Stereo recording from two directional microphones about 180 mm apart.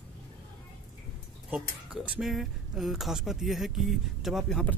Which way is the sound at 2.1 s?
Centre (ahead or behind).